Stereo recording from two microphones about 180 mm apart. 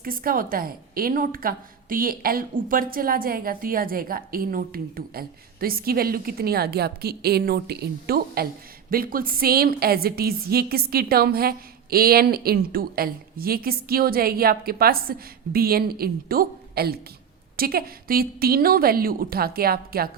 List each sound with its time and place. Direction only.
0.0 s a woman's voice: 55° right (ahead or behind)